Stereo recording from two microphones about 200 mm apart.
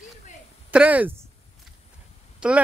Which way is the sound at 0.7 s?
5° right (ahead or behind).